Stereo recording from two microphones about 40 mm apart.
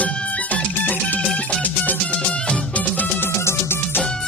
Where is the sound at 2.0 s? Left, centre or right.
Left.